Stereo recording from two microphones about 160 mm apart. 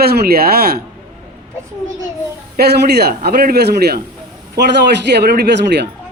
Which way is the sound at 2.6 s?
85° right.